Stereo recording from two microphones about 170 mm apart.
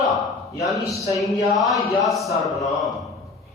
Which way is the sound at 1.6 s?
Centre (ahead or behind).